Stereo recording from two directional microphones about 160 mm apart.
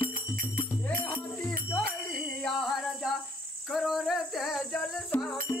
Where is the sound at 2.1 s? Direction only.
Centre (ahead or behind).